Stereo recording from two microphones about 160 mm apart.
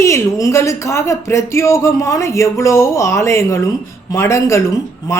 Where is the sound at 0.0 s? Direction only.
20° left (ahead or behind).